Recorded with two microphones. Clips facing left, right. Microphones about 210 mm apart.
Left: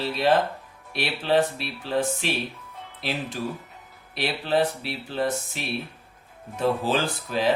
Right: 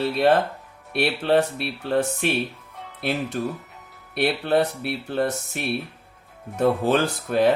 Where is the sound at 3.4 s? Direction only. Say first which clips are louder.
Right 3 dB; 55° right (ahead or behind).